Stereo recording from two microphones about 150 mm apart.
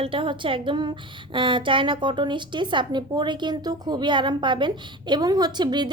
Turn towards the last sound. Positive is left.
turn(degrees=-30)  # may be behind; listen again after turning